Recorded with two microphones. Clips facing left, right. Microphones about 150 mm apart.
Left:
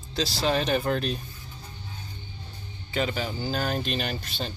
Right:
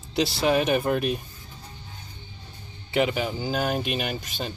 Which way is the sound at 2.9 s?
15° right (ahead or behind).